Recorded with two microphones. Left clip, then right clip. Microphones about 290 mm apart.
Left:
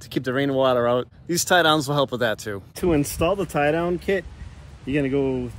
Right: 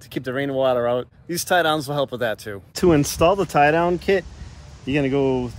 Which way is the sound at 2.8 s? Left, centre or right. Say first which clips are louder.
Right 5 dB; right.